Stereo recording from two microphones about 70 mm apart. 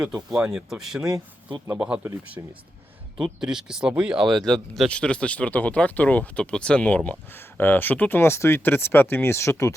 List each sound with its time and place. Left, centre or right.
0.0 s speech: centre
2.4 s speech: right
3.4 s speech: centre
4.9 s speech: centre
8.2 s speech: left